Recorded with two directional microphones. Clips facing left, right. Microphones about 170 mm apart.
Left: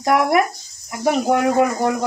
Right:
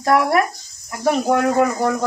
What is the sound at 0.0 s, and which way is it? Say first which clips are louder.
Speech: even; 15° left (ahead or behind).